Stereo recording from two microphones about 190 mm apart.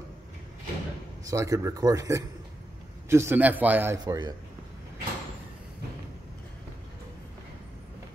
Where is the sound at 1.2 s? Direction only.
15° right (ahead or behind).